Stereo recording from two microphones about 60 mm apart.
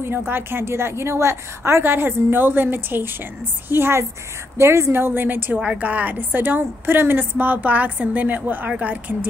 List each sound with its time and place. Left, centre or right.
0.3 s a woman's voice: right
4.9 s a woman's voice: right
5.6 s a woman's voice: right